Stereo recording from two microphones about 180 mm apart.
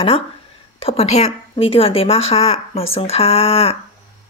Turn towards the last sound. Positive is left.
turn(degrees=35)  # may be behind; listen again after turning